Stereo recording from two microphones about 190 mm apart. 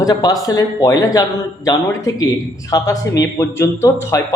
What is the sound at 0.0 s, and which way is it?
Speech, 20° left (ahead or behind).